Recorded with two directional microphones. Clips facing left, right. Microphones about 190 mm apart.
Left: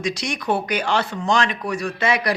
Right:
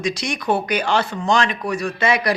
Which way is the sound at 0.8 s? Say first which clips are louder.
Right 1 dB; 30° right (ahead or behind).